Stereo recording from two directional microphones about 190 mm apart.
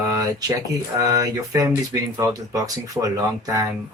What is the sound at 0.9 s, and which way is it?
Speech, 20° right (ahead or behind).